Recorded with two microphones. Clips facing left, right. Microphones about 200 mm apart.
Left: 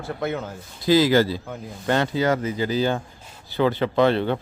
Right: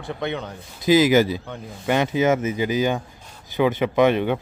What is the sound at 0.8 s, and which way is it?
Speech, 20° right (ahead or behind).